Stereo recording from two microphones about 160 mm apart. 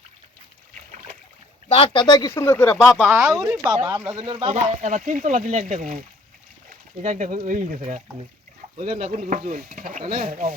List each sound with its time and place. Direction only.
1.7 s speech: 30° left (ahead or behind)
2.3 s speech: 15° left (ahead or behind)
2.7 s speech: centre (ahead or behind)
3.2 s speech: 20° right (ahead or behind)
4.2 s speech: 35° right (ahead or behind); by 5.9 s 55° right (ahead or behind)
7.0 s speech: 50° right (ahead or behind)
8.8 s speech: 40° right (ahead or behind); by 10.5 s 60° right (ahead or behind)